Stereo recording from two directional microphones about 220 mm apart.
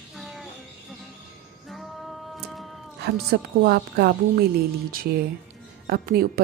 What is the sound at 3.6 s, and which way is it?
Speech, 45° right (ahead or behind).